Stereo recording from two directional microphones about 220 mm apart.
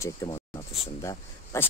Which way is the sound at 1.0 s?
15° left (ahead or behind).